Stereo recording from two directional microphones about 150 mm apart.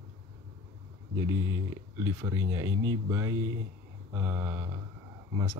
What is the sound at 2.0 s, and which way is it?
Speech, 20° right (ahead or behind).